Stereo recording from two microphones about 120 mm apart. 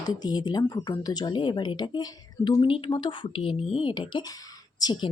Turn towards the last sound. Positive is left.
turn(degrees=40)  # may be behind; listen again after turning